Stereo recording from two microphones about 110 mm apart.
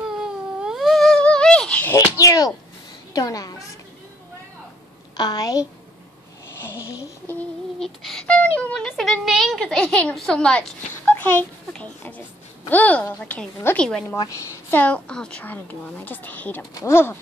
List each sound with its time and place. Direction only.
0.2 s cat: 5° right (ahead or behind); by 2.0 s 15° left (ahead or behind)
2.0 s a woman's voice: 30° left (ahead or behind)
5.1 s a woman's voice: 40° left (ahead or behind)
6.6 s speech: 25° left (ahead or behind)
7.8 s a sound: 5° left (ahead or behind)
8.4 s a child's voice: 15° left (ahead or behind)
8.8 s a sound: 5° left (ahead or behind)
9.2 s a child's voice: centre (ahead or behind); by 17.2 s 20° left (ahead or behind)